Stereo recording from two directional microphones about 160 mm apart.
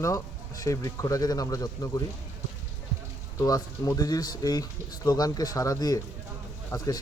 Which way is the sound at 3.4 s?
20° left (ahead or behind).